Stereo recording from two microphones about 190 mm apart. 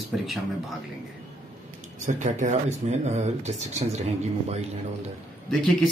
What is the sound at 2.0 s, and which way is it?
Speech, 40° right (ahead or behind).